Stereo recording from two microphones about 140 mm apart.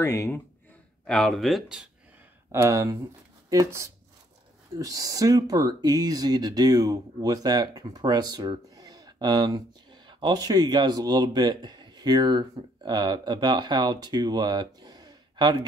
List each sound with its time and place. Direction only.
0.0 s speech: 20° left (ahead or behind)
1.0 s speech: 5° left (ahead or behind)
2.5 s speech: 20° right (ahead or behind)